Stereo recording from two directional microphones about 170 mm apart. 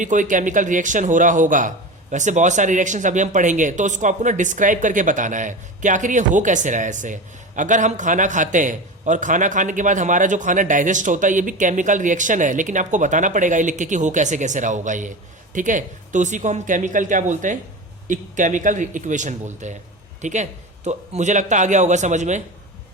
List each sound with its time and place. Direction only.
0.0 s a man's voice: 50° right (ahead or behind)